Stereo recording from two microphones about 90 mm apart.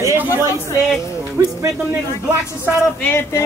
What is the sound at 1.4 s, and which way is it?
Speech, 35° right (ahead or behind).